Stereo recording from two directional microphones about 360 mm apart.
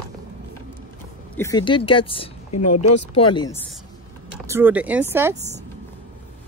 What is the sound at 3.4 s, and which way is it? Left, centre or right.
Speech, centre.